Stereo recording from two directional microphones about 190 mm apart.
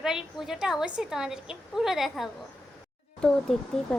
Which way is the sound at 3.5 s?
5° left (ahead or behind).